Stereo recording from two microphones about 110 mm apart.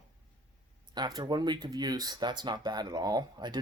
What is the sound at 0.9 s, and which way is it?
Speech, 40° right (ahead or behind).